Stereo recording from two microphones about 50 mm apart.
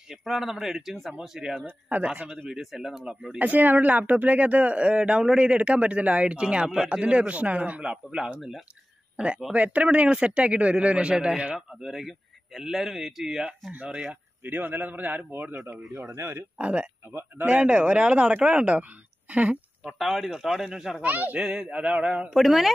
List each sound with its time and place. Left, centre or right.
0.1 s a man's voice: centre
1.6 s a man's voice: right
2.5 s speech: centre
3.1 s speech: right
11.5 s a man's voice: centre
13.4 s a man's voice: right
16.2 s a man's voice: right
16.5 s speech: right
19.9 s speech: centre
21.0 s a man's voice: right
21.4 s speech: right
22.3 s a man's voice: centre